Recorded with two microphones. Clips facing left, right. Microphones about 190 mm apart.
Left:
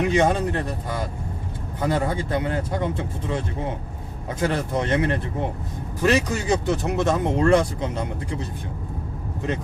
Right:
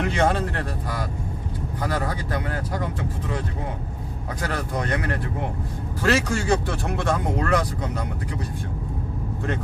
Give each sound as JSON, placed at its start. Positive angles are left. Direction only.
{"t": 0.0, "sound": "speech", "side_deg": 15}